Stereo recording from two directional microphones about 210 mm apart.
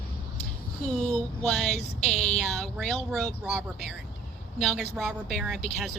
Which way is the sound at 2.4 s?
5° left (ahead or behind).